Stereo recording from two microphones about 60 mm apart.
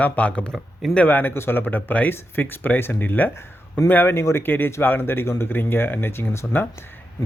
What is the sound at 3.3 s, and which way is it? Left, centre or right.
Speech, left.